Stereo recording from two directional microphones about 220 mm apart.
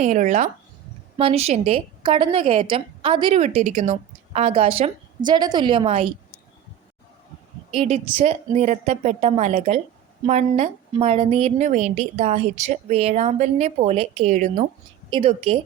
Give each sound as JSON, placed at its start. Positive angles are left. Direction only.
{"t": 0.0, "sound": "a woman's voice", "side_deg": -35}
{"t": 7.8, "sound": "a woman's voice", "side_deg": -30}